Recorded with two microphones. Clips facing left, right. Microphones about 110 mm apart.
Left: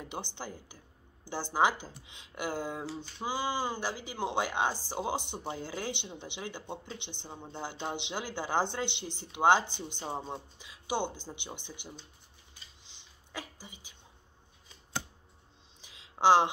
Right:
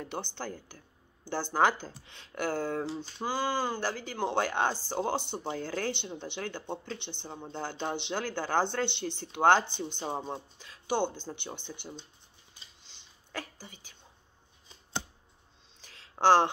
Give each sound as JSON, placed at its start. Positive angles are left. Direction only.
{"t": 0.0, "sound": "a woman's voice", "side_deg": 10}
{"t": 9.9, "sound": "speech", "side_deg": -15}
{"t": 10.6, "sound": "speech", "side_deg": 10}
{"t": 13.3, "sound": "a woman's voice", "side_deg": 10}
{"t": 15.8, "sound": "a sound", "side_deg": 15}